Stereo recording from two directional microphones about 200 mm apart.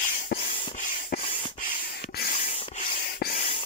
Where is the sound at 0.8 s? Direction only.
40° left (ahead or behind).